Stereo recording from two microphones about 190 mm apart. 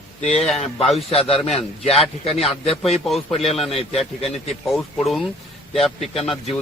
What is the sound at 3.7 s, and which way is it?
Speech, 30° left (ahead or behind).